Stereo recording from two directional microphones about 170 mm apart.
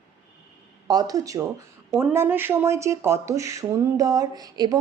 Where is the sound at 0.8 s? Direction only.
25° right (ahead or behind).